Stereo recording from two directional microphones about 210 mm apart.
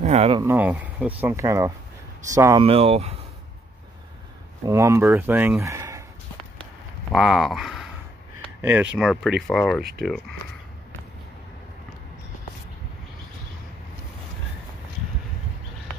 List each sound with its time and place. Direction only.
0.0 s speech: 35° right (ahead or behind)
0.4 s speech: 10° right (ahead or behind)
2.6 s speech: 30° right (ahead or behind)
4.6 s speech: 15° right (ahead or behind)
6.6 s a sound: centre (ahead or behind)
8.5 s speech: 10° right (ahead or behind)